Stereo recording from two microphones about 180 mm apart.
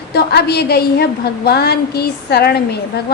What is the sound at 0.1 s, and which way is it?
Child singing, 65° left (ahead or behind).